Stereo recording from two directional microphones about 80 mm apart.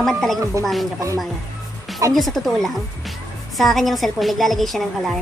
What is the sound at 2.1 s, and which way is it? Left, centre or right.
A woman's voice, centre.